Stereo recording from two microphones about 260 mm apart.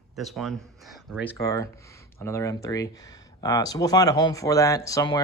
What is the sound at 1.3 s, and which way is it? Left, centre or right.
Speech, centre.